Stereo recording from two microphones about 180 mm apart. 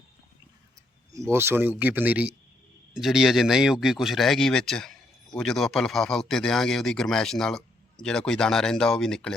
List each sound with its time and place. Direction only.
1.1 s speech: 15° right (ahead or behind); by 9.3 s 5° left (ahead or behind)